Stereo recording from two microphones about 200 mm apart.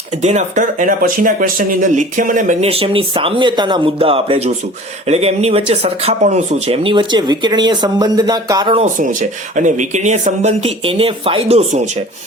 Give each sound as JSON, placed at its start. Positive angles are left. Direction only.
{"t": 0.2, "sound": "speech", "side_deg": -35}
{"t": 9.6, "sound": "speech", "side_deg": -40}